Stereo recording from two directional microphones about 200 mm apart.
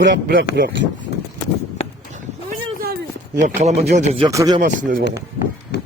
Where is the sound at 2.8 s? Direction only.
50° right (ahead or behind).